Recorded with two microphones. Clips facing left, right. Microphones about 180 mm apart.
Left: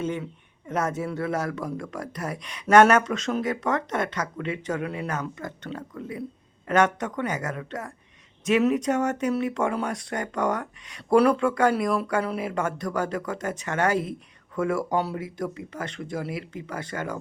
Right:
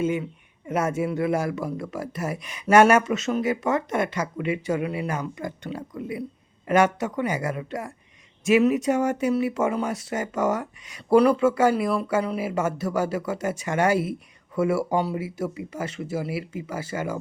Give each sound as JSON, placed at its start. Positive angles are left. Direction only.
{"t": 0.0, "sound": "speech", "side_deg": -10}